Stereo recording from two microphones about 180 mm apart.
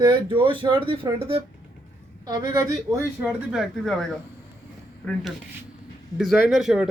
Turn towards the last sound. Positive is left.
turn(degrees=-5)  # may be behind; listen again after turning